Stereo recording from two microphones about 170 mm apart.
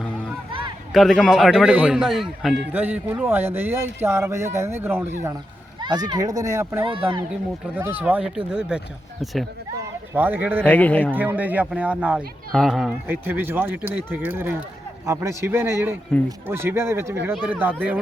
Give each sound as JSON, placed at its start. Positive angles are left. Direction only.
{"t": 0.9, "sound": "a man's voice", "side_deg": 0}
{"t": 5.8, "sound": "speech", "side_deg": -25}
{"t": 6.8, "sound": "speech", "side_deg": -30}
{"t": 7.8, "sound": "a man's voice", "side_deg": -10}
{"t": 10.2, "sound": "speech", "side_deg": -10}
{"t": 10.6, "sound": "speech", "side_deg": 10}
{"t": 11.1, "sound": "speech", "side_deg": -10}
{"t": 13.1, "sound": "speech", "side_deg": -10}